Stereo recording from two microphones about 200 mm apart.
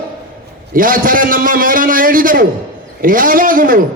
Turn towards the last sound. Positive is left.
turn(degrees=-45)  # may be behind; listen again after turning